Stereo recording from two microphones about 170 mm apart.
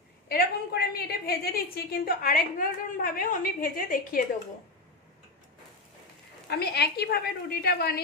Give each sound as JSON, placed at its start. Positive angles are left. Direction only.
{"t": 0.3, "sound": "a woman's voice", "side_deg": 65}
{"t": 6.5, "sound": "a woman's voice", "side_deg": 70}